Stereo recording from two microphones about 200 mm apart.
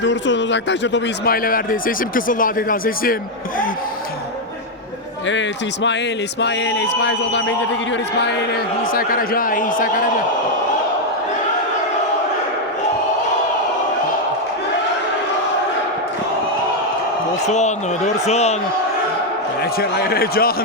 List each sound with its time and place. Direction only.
0.0 s a man's voice: 65° left (ahead or behind); by 3.2 s 45° left (ahead or behind)
5.3 s a sound: 65° left (ahead or behind)
8.9 s a man's voice: 45° left (ahead or behind)
17.4 s a man's voice: 35° left (ahead or behind)
19.8 s a man's voice: 50° left (ahead or behind)